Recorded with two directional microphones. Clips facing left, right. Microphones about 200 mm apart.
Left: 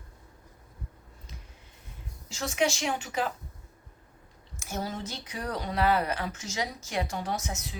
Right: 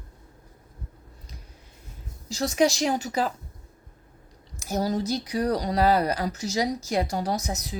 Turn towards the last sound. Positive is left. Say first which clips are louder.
# right 5 dB
turn(degrees=-35)  # may be behind; listen again after turning